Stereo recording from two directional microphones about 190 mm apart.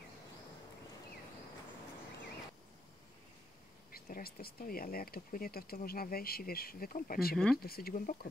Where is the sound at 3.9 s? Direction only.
50° left (ahead or behind).